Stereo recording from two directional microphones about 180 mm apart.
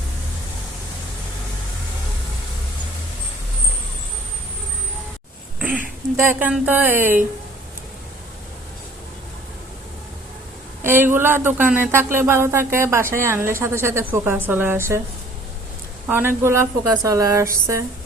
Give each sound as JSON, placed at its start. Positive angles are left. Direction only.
{"t": 5.5, "sound": "a sound", "side_deg": -10}
{"t": 6.5, "sound": "speech", "side_deg": -10}
{"t": 10.8, "sound": "speech", "side_deg": -10}
{"t": 16.0, "sound": "speech", "side_deg": -10}